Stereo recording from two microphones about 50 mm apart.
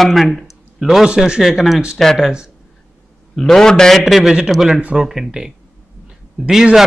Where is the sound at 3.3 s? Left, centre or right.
Centre.